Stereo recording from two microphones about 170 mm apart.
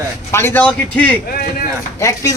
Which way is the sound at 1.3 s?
60° left (ahead or behind).